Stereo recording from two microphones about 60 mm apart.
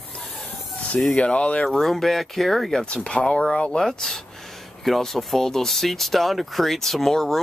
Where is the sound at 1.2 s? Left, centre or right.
Centre.